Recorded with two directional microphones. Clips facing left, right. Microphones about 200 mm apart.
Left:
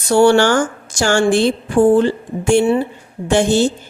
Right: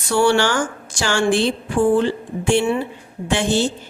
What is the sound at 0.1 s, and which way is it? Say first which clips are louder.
A woman's voice: left 6 dB; 45° left (ahead or behind).